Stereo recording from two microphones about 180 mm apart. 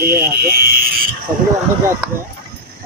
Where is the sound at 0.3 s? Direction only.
60° right (ahead or behind).